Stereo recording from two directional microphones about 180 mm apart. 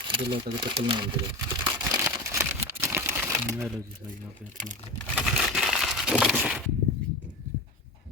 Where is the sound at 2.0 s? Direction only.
15° right (ahead or behind).